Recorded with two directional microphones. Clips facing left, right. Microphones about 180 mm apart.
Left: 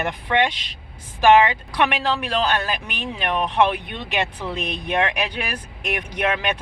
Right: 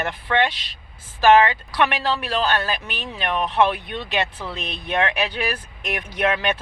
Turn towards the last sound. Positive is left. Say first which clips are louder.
# right 1 dB
turn(degrees=15)  # may be behind; listen again after turning